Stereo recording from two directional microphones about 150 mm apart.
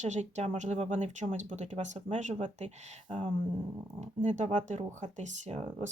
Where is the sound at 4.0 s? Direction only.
50° right (ahead or behind).